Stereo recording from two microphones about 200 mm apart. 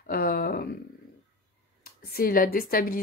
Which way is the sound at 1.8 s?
50° left (ahead or behind).